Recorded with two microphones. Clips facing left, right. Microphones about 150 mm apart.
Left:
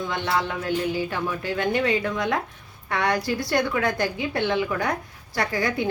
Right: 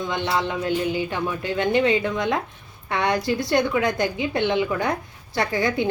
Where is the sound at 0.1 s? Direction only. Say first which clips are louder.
Right 2 dB; 20° right (ahead or behind).